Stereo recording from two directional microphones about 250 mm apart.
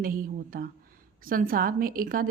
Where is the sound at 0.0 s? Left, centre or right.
Right.